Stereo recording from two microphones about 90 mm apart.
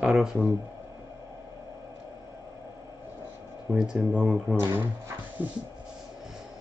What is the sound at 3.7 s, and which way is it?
Speech, 10° right (ahead or behind).